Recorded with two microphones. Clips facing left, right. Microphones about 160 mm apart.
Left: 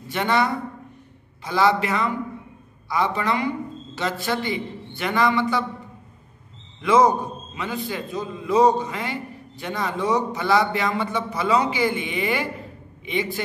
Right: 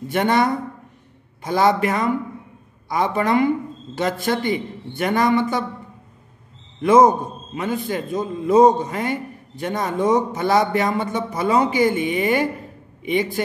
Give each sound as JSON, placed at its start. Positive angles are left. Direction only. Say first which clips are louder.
{"t": 0.1, "sound": "a man's voice", "louder": "right 3 dB", "side_deg": -50}
{"t": 6.8, "sound": "a man's voice", "louder": "right 4 dB", "side_deg": -50}